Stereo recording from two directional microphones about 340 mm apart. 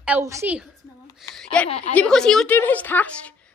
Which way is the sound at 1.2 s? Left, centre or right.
Centre.